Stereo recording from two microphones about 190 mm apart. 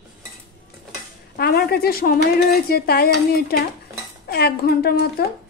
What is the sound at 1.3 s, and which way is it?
Speech, 55° left (ahead or behind).